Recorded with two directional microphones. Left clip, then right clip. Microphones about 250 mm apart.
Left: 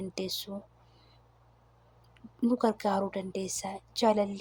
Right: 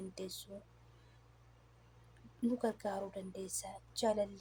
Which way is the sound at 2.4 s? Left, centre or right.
Centre.